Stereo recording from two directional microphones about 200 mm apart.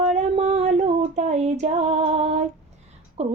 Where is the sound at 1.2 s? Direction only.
35° right (ahead or behind).